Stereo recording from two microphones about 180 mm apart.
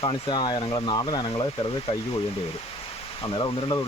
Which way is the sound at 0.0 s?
25° left (ahead or behind).